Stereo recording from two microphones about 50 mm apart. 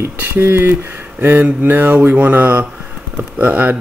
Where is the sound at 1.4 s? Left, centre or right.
Right.